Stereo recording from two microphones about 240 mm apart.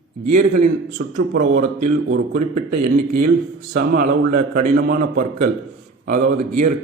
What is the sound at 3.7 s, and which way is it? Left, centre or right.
A man's voice, right.